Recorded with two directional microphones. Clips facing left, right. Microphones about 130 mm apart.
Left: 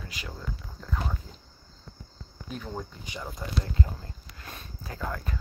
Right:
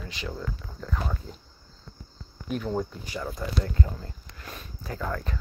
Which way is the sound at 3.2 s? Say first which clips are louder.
Right 4 dB; 20° left (ahead or behind).